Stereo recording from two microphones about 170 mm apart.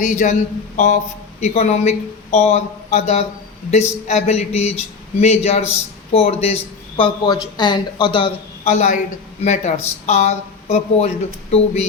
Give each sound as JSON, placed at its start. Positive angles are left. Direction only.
{"t": 0.0, "sound": "a man's voice", "side_deg": 45}